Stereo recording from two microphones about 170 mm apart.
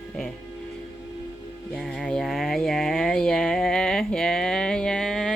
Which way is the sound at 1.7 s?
Centre (ahead or behind).